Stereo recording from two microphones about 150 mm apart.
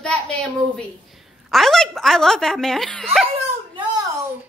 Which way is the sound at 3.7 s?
30° right (ahead or behind).